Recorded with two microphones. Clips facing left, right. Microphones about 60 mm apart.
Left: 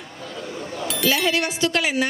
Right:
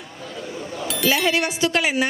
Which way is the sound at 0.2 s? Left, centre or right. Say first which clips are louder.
Even; centre.